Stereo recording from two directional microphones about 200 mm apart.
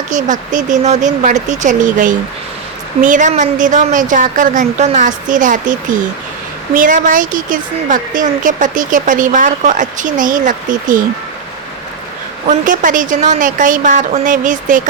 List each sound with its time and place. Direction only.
0.1 s a woman's voice: 40° right (ahead or behind)
6.7 s a woman's voice: 40° right (ahead or behind)
12.5 s a woman's voice: 40° right (ahead or behind)